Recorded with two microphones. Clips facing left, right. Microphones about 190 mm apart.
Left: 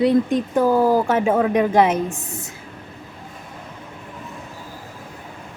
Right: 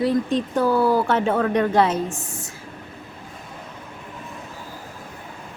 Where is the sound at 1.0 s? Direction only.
10° left (ahead or behind).